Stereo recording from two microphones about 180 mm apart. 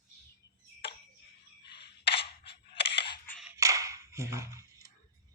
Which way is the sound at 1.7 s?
30° left (ahead or behind).